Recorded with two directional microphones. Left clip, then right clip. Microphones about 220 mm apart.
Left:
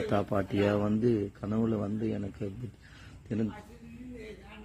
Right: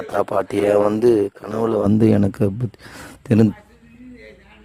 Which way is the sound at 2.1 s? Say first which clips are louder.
Right 18 dB; 50° right (ahead or behind).